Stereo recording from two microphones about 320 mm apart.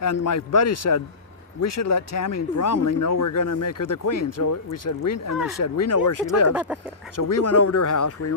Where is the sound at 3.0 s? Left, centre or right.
Left.